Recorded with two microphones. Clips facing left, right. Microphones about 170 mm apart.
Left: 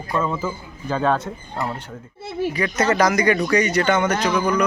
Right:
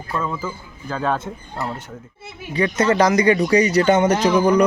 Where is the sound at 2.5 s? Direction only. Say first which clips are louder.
Right 4 dB; 30° right (ahead or behind).